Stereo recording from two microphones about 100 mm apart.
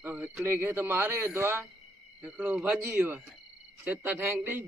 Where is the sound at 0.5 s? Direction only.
20° right (ahead or behind).